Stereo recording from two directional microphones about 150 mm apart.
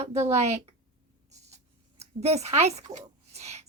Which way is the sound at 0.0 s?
50° right (ahead or behind).